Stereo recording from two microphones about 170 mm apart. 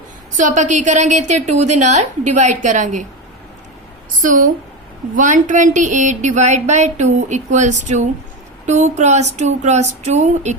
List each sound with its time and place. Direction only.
0.3 s speech: 45° right (ahead or behind)
4.2 s speech: 50° right (ahead or behind)